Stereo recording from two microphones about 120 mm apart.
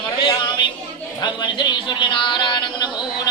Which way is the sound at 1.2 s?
40° left (ahead or behind).